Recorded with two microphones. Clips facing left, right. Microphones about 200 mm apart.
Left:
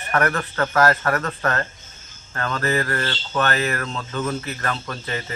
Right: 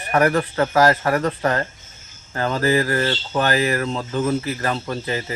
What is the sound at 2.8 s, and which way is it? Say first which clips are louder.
Speech: right 4 dB; 25° right (ahead or behind).